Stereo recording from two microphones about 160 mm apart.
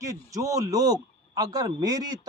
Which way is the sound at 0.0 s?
20° right (ahead or behind).